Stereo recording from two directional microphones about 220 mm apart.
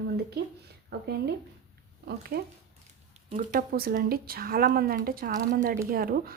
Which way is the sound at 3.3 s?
35° right (ahead or behind).